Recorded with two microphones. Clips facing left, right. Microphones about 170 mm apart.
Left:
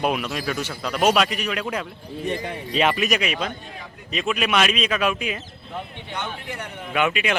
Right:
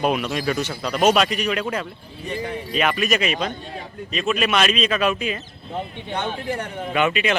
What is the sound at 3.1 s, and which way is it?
Speech, 5° left (ahead or behind).